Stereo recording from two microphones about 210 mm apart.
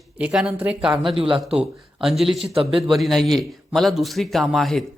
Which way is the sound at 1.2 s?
25° right (ahead or behind).